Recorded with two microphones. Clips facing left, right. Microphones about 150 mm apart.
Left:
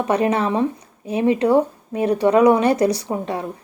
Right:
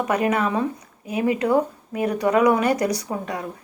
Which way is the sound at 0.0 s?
30° left (ahead or behind).